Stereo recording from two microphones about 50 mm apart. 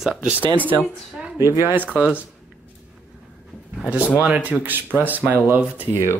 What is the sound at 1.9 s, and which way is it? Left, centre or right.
Speech, right.